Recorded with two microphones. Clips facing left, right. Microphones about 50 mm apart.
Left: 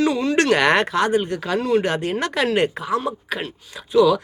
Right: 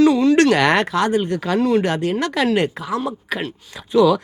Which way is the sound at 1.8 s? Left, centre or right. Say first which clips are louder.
Right 2 dB; left.